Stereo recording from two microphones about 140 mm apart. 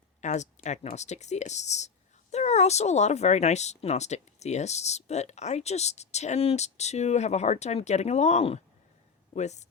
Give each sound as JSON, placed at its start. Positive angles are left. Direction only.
{"t": 0.2, "sound": "speech", "side_deg": 55}